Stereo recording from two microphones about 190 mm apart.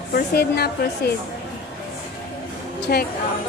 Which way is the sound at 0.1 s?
55° left (ahead or behind).